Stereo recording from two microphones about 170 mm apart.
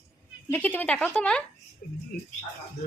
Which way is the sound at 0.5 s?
10° left (ahead or behind).